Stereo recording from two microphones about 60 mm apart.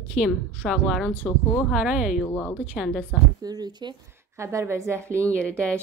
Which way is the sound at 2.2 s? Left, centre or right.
Left.